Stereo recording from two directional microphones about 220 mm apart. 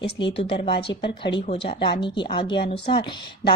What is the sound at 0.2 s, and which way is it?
Speech, 25° left (ahead or behind).